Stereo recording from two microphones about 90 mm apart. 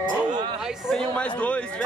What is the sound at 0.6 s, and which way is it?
Speech, 5° right (ahead or behind).